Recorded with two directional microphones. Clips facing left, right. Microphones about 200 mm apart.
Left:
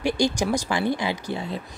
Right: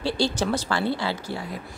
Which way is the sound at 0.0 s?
15° left (ahead or behind).